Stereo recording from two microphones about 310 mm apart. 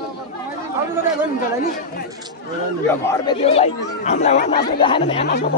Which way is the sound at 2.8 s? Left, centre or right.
Centre.